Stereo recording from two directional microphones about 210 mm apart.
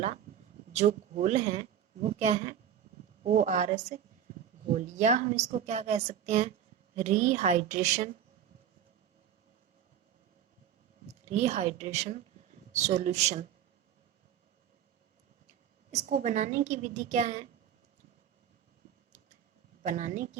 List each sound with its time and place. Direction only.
0.7 s a woman's voice: 35° right (ahead or behind)
11.1 s a woman's voice: 30° right (ahead or behind)
15.9 s a woman's voice: 35° right (ahead or behind)
19.8 s a woman's voice: 40° right (ahead or behind)